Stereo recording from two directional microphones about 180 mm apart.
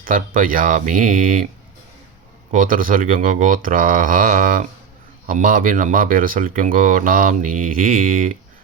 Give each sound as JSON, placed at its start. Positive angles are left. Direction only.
{"t": 0.0, "sound": "speech", "side_deg": -50}
{"t": 2.5, "sound": "speech", "side_deg": -50}